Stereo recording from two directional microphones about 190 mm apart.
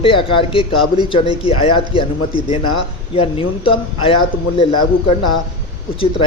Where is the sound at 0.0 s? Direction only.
25° left (ahead or behind).